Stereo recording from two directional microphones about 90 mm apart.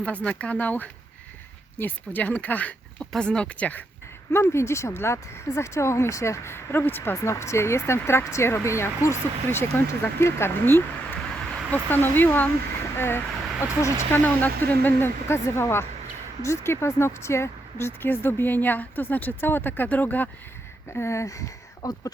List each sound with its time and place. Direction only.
0.0 s speech: 15° left (ahead or behind)
4.3 s speech: 30° left (ahead or behind)
20.9 s speech: 30° left (ahead or behind)